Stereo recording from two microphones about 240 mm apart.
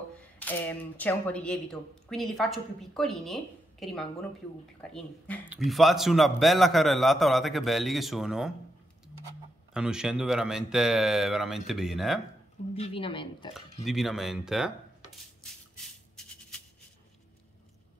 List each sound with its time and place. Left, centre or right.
0.4 s speech: centre
9.8 s speech: centre
12.7 s speech: left
13.8 s speech: centre
15.4 s music: centre